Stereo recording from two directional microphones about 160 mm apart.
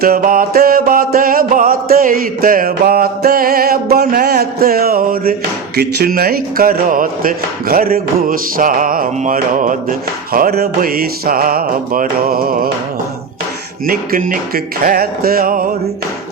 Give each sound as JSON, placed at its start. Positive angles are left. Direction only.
{"t": 0.0, "sound": "music", "side_deg": -65}
{"t": 5.7, "sound": "speech", "side_deg": -80}
{"t": 10.3, "sound": "speech", "side_deg": -70}
{"t": 13.8, "sound": "speech", "side_deg": -65}